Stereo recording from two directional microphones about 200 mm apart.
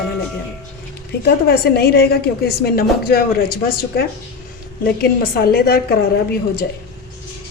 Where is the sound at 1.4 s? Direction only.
50° left (ahead or behind).